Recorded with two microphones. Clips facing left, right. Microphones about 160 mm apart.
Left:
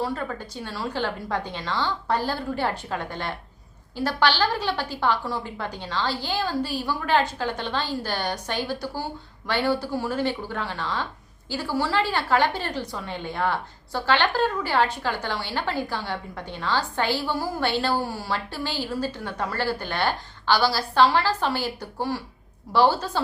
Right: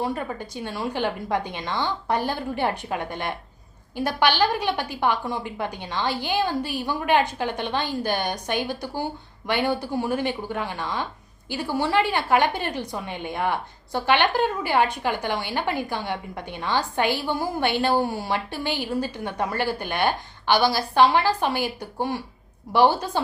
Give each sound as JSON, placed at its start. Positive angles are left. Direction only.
{"t": 0.0, "sound": "a woman's voice", "side_deg": -15}